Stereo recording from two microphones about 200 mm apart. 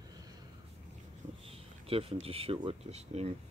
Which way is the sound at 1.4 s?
30° right (ahead or behind).